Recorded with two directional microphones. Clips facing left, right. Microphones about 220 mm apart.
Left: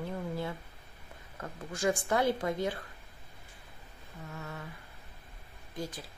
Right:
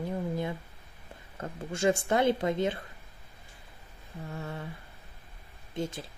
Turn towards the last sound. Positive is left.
turn(degrees=-25)  # may be behind; listen again after turning